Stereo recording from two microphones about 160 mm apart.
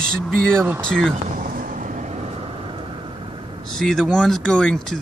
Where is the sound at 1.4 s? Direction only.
60° right (ahead or behind); by 3.4 s 30° right (ahead or behind).